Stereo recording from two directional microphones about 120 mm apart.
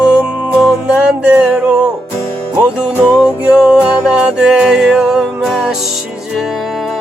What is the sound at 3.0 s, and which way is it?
Music, 10° right (ahead or behind).